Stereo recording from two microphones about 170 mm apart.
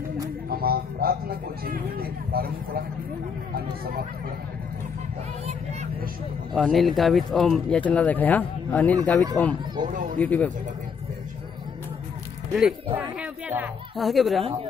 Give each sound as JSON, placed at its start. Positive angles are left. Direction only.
{"t": 0.5, "sound": "speech", "side_deg": -60}
{"t": 6.5, "sound": "speech", "side_deg": 0}
{"t": 9.9, "sound": "speech", "side_deg": -50}
{"t": 10.2, "sound": "speech", "side_deg": 10}
{"t": 12.5, "sound": "speech", "side_deg": -5}
{"t": 13.9, "sound": "speech", "side_deg": 0}
{"t": 14.4, "sound": "a woman's voice", "side_deg": -35}